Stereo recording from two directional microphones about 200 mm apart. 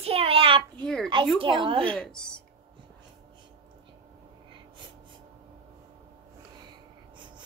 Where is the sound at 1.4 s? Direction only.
25° right (ahead or behind).